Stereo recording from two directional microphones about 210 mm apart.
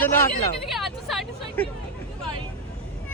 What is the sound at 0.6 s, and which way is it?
Vehicle, centre (ahead or behind).